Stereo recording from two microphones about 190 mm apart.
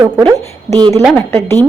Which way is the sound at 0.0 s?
20° right (ahead or behind).